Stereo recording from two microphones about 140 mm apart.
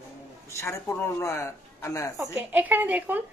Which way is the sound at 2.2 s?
15° right (ahead or behind).